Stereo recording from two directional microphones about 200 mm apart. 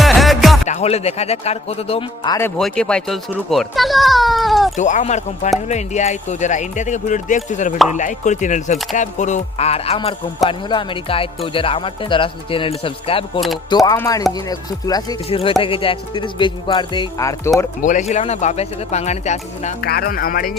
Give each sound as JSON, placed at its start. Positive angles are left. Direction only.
{"t": 0.0, "sound": "music", "side_deg": 0}
{"t": 0.7, "sound": "speech", "side_deg": 35}
{"t": 2.6, "sound": "a child's voice", "side_deg": 5}
{"t": 4.8, "sound": "speech", "side_deg": 35}
{"t": 17.8, "sound": "speech", "side_deg": 35}
{"t": 19.8, "sound": "speech", "side_deg": 50}